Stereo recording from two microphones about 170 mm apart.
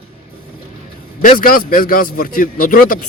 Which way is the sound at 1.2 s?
55° left (ahead or behind).